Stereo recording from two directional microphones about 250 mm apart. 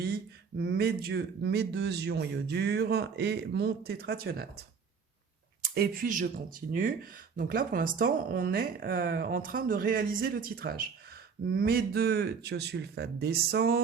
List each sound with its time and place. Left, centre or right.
0.0 s speech: right
5.6 s speech: right